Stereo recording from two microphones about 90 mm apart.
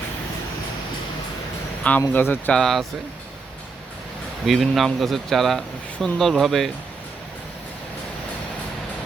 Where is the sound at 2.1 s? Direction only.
20° left (ahead or behind).